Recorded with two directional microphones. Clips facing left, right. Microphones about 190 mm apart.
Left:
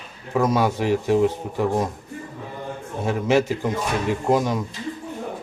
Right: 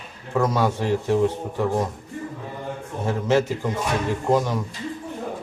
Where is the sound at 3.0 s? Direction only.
10° left (ahead or behind).